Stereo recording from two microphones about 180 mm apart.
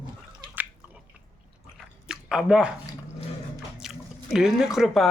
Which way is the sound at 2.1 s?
5° right (ahead or behind).